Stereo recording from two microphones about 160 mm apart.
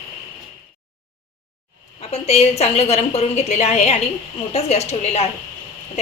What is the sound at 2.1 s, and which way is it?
A woman's voice, 40° left (ahead or behind).